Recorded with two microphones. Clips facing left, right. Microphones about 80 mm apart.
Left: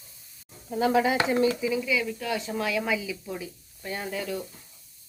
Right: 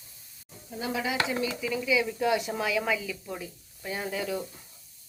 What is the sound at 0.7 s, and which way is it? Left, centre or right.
Speech, left.